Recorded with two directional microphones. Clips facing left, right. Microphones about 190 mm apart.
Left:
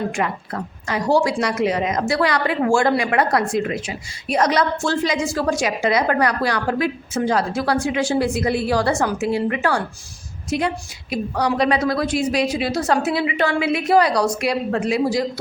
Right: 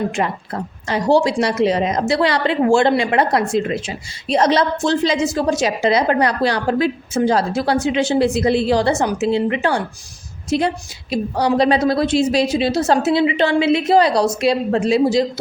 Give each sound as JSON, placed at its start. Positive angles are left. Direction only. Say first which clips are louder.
{"t": 0.1, "sound": "a woman's voice", "louder": "right 2 dB", "side_deg": -30}